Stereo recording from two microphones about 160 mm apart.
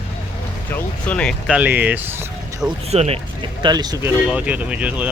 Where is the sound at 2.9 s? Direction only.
40° right (ahead or behind).